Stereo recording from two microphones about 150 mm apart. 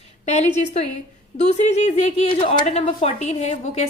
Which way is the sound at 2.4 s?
35° left (ahead or behind).